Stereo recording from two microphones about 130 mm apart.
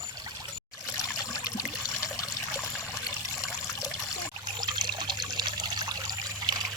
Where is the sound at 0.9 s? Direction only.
30° left (ahead or behind).